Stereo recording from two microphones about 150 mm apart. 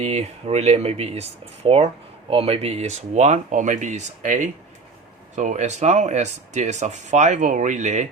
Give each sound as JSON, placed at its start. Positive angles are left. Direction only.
{"t": 0.0, "sound": "speech", "side_deg": -45}